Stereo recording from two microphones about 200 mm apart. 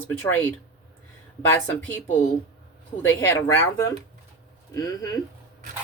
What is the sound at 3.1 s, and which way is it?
Speech, 15° left (ahead or behind).